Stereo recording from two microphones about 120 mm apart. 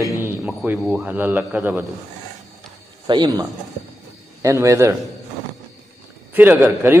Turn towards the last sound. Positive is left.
turn(degrees=-15)  # may be behind; listen again after turning